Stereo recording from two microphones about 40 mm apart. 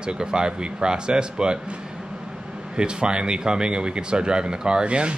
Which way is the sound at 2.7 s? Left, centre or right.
Right.